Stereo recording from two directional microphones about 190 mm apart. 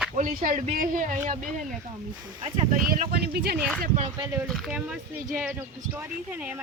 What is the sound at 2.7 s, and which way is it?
Speech, 50° right (ahead or behind).